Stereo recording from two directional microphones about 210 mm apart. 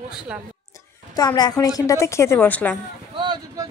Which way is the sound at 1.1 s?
20° left (ahead or behind).